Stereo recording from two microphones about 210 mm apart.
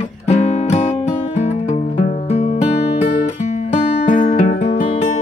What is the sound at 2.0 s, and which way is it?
Music, 30° left (ahead or behind).